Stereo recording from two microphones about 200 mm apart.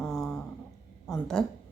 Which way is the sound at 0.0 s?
Centre (ahead or behind).